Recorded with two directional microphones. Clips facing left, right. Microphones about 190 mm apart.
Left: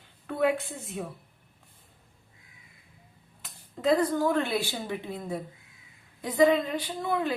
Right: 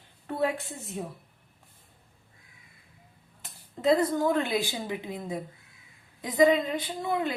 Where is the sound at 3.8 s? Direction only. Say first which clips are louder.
Even; 25° right (ahead or behind).